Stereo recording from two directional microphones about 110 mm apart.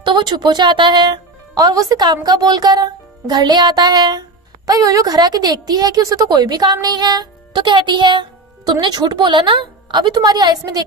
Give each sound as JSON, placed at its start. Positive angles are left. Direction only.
{"t": 0.0, "sound": "speech", "side_deg": -40}